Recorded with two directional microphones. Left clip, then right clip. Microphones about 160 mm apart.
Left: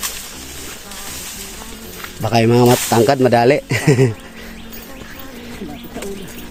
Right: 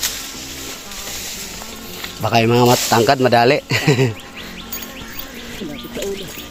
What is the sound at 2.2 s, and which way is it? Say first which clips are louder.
Speech: left 1 dB; 40° left (ahead or behind).